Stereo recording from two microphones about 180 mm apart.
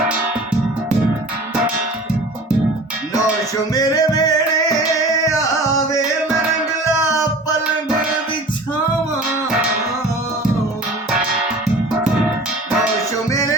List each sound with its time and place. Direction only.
3.8 s music: 20° left (ahead or behind)
13.3 s music: 20° left (ahead or behind)